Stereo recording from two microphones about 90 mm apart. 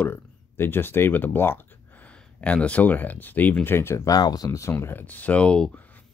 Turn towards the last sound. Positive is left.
turn(degrees=10)  # may be behind; listen again after turning